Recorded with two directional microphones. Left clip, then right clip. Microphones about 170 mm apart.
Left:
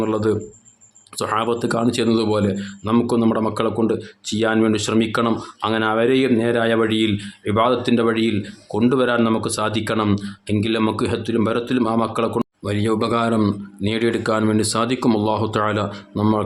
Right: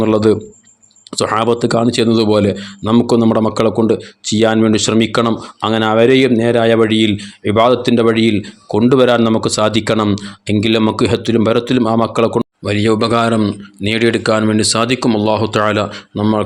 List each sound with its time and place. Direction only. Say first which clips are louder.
0.0 s a man's voice: right 8 dB; 35° right (ahead or behind)
12.4 s speech: right 7 dB; 20° right (ahead or behind)